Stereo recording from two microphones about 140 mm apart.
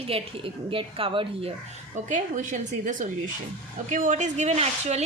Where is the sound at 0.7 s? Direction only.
40° right (ahead or behind).